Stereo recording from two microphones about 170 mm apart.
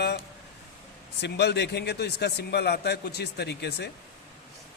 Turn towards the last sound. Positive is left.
turn(degrees=80)